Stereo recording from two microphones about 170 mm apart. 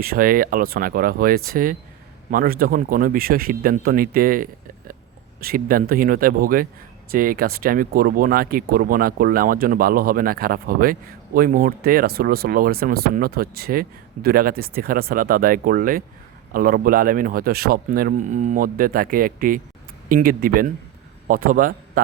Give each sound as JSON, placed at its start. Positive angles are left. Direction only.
{"t": 0.0, "sound": "a man's voice", "side_deg": -60}